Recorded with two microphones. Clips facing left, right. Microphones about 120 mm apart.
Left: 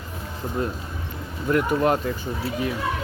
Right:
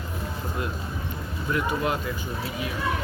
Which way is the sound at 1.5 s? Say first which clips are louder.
Left 6 dB; 45° left (ahead or behind).